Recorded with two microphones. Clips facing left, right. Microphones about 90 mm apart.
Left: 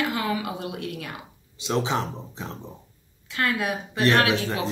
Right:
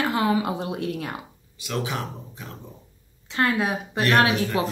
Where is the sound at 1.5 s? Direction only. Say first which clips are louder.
Left 4 dB; 25° left (ahead or behind).